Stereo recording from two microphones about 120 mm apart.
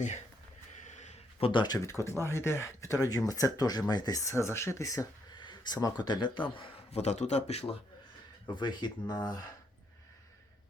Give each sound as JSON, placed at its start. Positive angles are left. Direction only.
{"t": 0.8, "sound": "a sound", "side_deg": 75}
{"t": 1.4, "sound": "speech", "side_deg": 45}
{"t": 5.3, "sound": "speech", "side_deg": 40}
{"t": 6.6, "sound": "a man's voice", "side_deg": 60}
{"t": 8.4, "sound": "speech", "side_deg": 40}